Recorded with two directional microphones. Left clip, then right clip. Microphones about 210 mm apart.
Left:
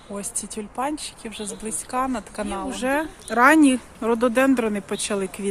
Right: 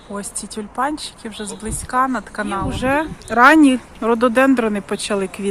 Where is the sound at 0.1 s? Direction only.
10° left (ahead or behind).